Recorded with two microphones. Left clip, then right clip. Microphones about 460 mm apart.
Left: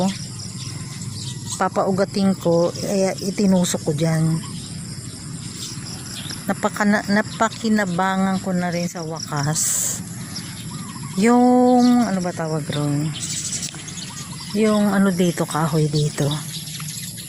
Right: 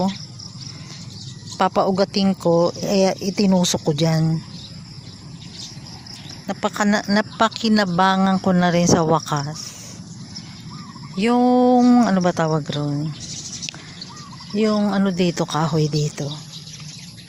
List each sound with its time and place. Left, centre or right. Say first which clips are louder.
1.5 s speech: right 2 dB; right
6.5 s speech: even; right
11.2 s speech: left 1 dB; right
14.6 s speech: left 1 dB; right